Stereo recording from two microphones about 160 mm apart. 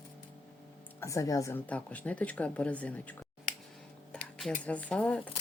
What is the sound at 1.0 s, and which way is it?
Speech, 20° left (ahead or behind).